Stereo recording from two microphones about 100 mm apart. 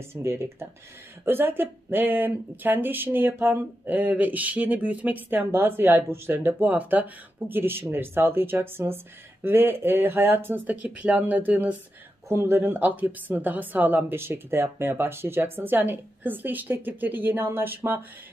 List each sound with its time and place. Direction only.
0.1 s speech: 25° right (ahead or behind)